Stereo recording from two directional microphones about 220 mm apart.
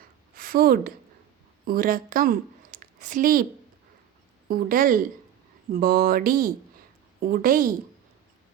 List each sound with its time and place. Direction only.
0.3 s a woman's voice: 40° right (ahead or behind)
4.4 s speech: 40° right (ahead or behind)